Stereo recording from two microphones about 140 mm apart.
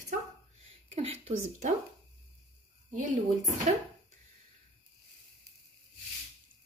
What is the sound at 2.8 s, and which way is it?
Speech, 65° right (ahead or behind).